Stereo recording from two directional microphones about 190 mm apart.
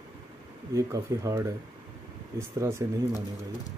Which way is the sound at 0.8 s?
15° right (ahead or behind).